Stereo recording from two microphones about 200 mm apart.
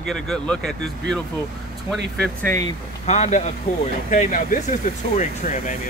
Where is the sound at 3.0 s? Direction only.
35° left (ahead or behind).